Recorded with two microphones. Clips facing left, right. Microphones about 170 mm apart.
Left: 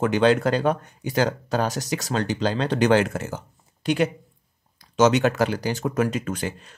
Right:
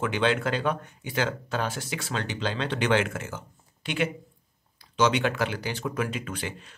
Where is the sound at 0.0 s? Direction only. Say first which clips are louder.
Left 7 dB; 40° left (ahead or behind).